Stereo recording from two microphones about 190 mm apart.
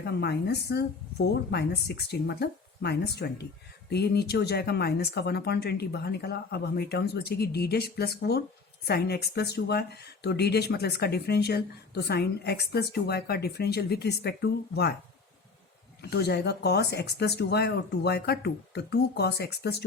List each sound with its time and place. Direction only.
0.0 s speech: 60° left (ahead or behind)
16.0 s speech: 60° left (ahead or behind)